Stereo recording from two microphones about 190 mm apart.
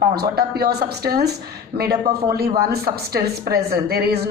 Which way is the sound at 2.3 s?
55° right (ahead or behind).